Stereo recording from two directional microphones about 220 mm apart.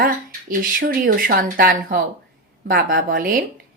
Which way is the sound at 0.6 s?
40° right (ahead or behind).